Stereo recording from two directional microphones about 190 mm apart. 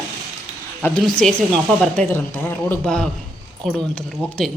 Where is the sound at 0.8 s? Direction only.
10° left (ahead or behind).